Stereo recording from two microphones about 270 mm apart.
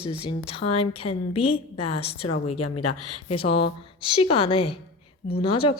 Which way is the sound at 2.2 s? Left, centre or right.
Left.